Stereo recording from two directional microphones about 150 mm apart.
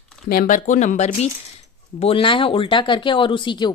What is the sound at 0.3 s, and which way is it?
Speech, 65° left (ahead or behind).